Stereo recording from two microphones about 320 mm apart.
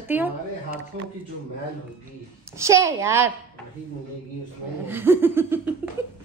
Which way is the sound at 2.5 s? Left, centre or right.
Centre.